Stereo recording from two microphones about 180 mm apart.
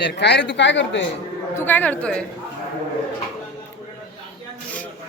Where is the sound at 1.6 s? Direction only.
10° left (ahead or behind).